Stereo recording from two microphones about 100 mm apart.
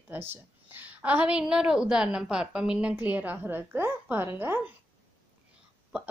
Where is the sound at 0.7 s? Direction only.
20° right (ahead or behind).